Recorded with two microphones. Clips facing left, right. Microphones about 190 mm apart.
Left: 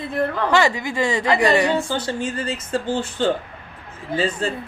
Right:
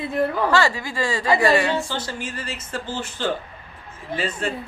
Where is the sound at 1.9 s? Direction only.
30° left (ahead or behind).